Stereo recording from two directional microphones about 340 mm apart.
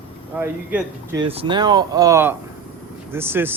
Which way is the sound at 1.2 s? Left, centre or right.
Centre.